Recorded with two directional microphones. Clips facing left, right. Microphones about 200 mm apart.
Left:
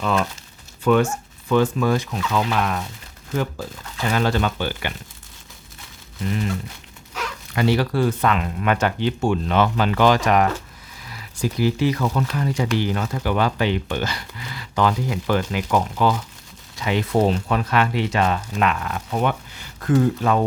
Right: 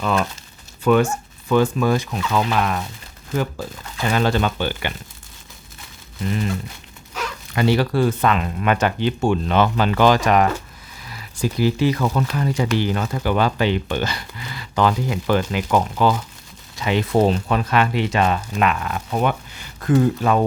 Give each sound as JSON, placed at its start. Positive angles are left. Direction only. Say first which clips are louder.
{"t": 0.0, "sound": "speech", "louder": "right 1 dB", "side_deg": -5}
{"t": 2.5, "sound": "speech", "louder": "right 2 dB", "side_deg": -5}
{"t": 7.5, "sound": "speech", "louder": "right 2 dB", "side_deg": -25}
{"t": 11.3, "sound": "speech", "louder": "right 1 dB", "side_deg": -30}